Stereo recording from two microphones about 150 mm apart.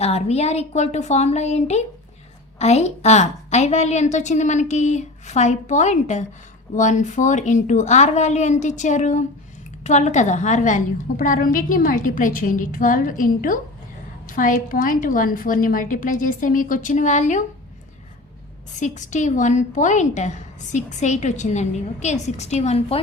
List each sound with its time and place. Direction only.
0.0 s a woman's voice: 45° left (ahead or behind)
18.8 s a woman's voice: 55° left (ahead or behind)